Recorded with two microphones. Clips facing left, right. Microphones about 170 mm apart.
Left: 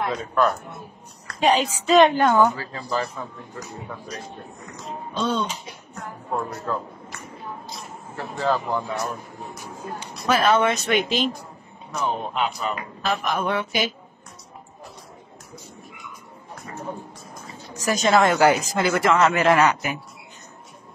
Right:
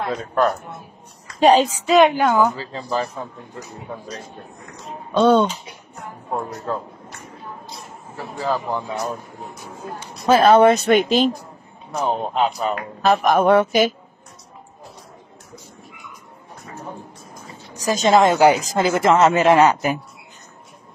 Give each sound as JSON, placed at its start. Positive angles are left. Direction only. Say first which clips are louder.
{"t": 1.4, "sound": "speech", "louder": "right 6 dB", "side_deg": -35}
{"t": 1.9, "sound": "a woman's voice", "louder": "even", "side_deg": -10}
{"t": 5.1, "sound": "speech", "louder": "right 11 dB", "side_deg": -55}
{"t": 6.3, "sound": "speech", "louder": "right 1 dB", "side_deg": -30}
{"t": 8.2, "sound": "a woman's voice", "louder": "even", "side_deg": -5}
{"t": 10.2, "sound": "speech", "louder": "right 7 dB", "side_deg": -30}
{"t": 17.9, "sound": "a woman's voice", "louder": "right 3 dB", "side_deg": -20}